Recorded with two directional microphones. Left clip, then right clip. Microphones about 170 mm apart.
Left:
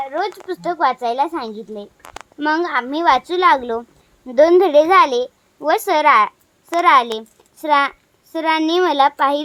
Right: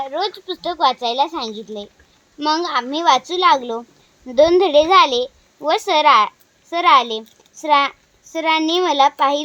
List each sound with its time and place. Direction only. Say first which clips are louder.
0.0 s a child's voice: even; 5° left (ahead or behind)